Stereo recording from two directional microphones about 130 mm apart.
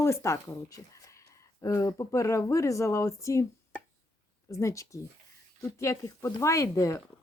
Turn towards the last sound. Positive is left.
turn(degrees=25)  # may be behind; listen again after turning